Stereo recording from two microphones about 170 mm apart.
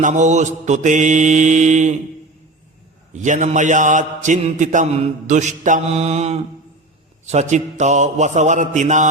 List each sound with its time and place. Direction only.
0.0 s mantra: 45° right (ahead or behind)
3.1 s mantra: 45° right (ahead or behind)